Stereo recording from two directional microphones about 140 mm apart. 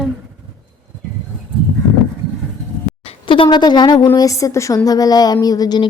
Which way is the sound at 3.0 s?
40° left (ahead or behind).